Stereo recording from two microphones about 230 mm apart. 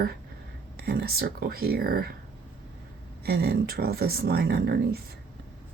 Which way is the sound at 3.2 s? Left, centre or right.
Right.